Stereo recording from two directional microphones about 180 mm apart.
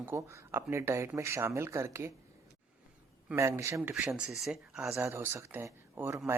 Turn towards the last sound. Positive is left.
turn(degrees=-15)  # may be behind; listen again after turning